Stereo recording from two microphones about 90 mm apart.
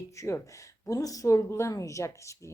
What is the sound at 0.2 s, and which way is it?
Speech, 35° left (ahead or behind).